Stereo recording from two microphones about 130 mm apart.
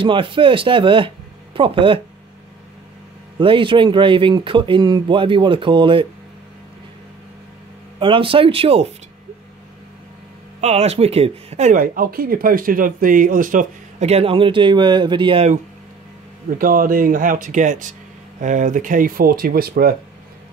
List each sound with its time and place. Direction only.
0.0 s speech: 40° right (ahead or behind)
3.3 s speech: 40° right (ahead or behind)
8.0 s speech: 40° right (ahead or behind)
10.6 s speech: 55° right (ahead or behind); by 14.0 s 90° right
14.0 s speech: 50° right (ahead or behind)
16.4 s speech: 90° right